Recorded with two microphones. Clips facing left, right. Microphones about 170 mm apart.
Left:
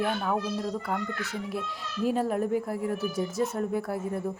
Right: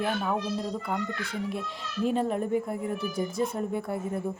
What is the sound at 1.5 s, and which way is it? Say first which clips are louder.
A woman's voice: even; 5° left (ahead or behind).